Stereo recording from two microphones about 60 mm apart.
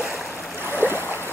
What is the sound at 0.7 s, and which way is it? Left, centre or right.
Boat, right.